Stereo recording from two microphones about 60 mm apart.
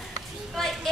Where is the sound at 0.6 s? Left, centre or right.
Centre.